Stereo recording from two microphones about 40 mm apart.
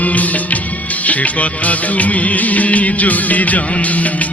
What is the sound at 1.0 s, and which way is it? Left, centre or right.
Music of bollywood, left.